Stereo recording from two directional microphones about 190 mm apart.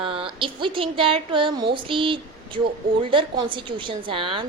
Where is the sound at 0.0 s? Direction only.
30° right (ahead or behind).